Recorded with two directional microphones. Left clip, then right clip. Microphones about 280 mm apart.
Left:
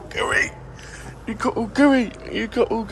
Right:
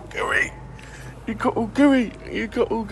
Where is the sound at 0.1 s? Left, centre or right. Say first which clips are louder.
Left 1 dB; centre.